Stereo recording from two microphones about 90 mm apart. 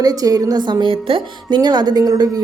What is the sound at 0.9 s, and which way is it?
Speech, 80° right.